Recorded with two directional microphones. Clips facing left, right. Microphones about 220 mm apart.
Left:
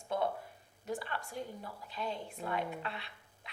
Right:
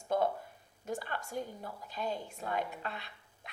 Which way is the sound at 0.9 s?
45° right (ahead or behind).